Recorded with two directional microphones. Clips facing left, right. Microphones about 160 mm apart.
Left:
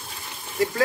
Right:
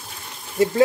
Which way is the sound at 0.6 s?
25° right (ahead or behind).